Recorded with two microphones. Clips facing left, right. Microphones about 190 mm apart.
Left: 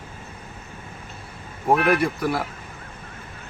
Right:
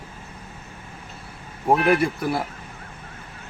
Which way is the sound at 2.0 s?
Centre (ahead or behind).